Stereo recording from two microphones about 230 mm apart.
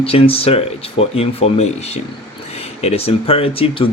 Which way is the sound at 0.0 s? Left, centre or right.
Left.